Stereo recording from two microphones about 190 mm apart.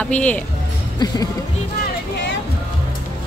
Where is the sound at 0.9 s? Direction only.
20° left (ahead or behind).